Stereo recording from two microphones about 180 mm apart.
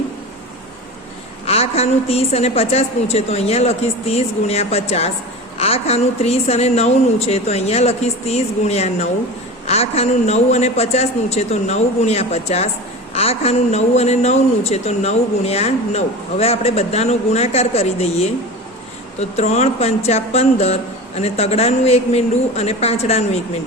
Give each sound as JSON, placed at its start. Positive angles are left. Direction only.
{"t": 1.5, "sound": "speech", "side_deg": 35}